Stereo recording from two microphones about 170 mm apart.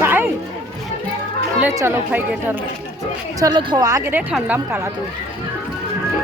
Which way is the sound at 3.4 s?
25° right (ahead or behind).